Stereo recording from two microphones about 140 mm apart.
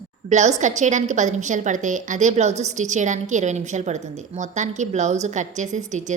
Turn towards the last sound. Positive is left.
turn(degrees=-60)  # may be behind; listen again after turning